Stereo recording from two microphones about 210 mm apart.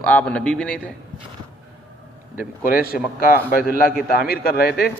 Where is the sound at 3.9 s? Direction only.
45° left (ahead or behind).